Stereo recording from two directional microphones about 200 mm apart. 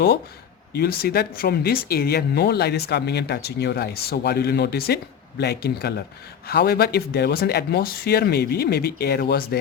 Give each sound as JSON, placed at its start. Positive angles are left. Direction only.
{"t": 0.7, "sound": "speech", "side_deg": 50}